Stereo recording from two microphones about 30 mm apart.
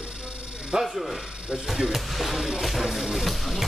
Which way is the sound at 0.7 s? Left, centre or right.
Centre.